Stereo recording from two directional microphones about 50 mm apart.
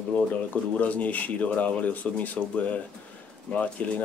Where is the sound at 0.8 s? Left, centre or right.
Left.